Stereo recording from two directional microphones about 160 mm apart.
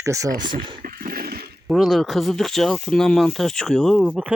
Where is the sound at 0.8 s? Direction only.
60° right (ahead or behind).